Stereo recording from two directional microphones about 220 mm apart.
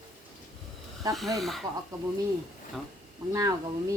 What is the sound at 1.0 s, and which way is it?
Speech, 15° right (ahead or behind).